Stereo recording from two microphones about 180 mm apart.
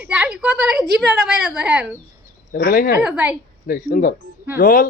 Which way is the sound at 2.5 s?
55° left (ahead or behind).